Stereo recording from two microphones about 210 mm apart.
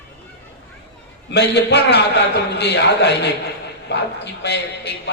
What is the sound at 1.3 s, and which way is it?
A man's voice, 55° left (ahead or behind).